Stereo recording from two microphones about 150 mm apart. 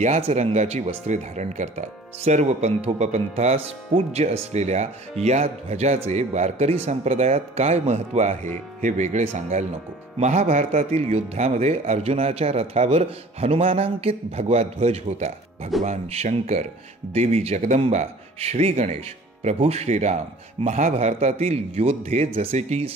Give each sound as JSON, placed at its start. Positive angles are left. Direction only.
{"t": 0.0, "sound": "speech", "side_deg": -45}